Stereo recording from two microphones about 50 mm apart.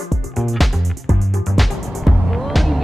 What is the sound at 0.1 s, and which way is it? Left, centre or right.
Music, centre.